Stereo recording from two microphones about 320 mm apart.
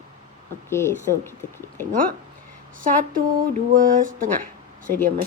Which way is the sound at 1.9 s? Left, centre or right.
Right.